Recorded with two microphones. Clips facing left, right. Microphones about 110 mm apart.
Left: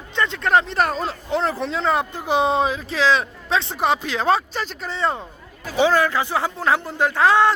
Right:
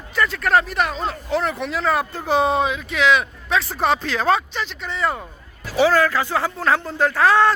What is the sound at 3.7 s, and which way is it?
Speech, 15° left (ahead or behind).